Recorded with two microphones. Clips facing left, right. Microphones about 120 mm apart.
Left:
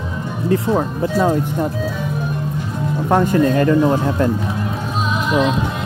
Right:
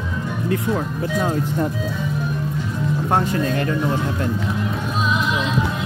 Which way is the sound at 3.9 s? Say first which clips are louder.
Left 6 dB; 40° left (ahead or behind).